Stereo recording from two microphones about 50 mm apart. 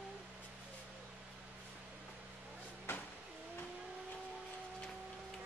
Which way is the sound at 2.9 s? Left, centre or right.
Left.